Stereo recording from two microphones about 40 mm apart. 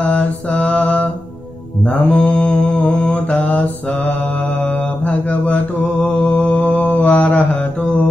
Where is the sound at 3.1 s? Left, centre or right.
Left.